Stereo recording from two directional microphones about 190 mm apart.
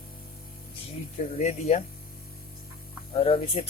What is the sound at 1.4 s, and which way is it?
Speech, 35° left (ahead or behind).